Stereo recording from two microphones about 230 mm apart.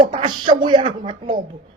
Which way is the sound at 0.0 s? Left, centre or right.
Right.